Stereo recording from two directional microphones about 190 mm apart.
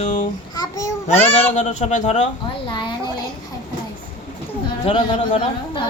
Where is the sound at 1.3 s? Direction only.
35° left (ahead or behind).